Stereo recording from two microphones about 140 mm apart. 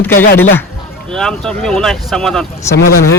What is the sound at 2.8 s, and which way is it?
Speech, 90° left.